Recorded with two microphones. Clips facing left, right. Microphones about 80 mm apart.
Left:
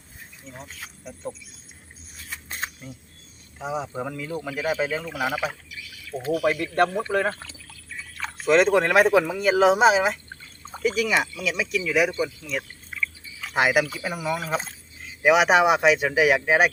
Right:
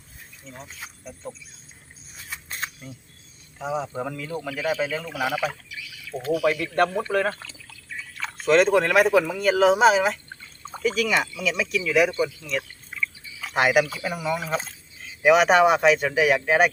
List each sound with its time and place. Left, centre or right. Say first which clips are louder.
0.4 s speech: even; centre
3.6 s speech: right 1 dB; centre
6.3 s speech: right 1 dB; left
6.7 s speech: even; centre
11.1 s speech: even; centre